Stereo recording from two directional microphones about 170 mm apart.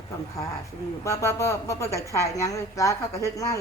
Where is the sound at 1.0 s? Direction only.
15° left (ahead or behind).